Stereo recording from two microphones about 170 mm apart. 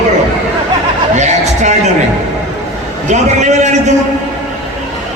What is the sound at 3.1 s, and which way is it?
Speech, 45° right (ahead or behind).